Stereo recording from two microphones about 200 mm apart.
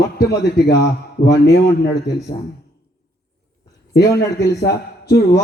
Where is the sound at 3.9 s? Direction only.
55° left (ahead or behind).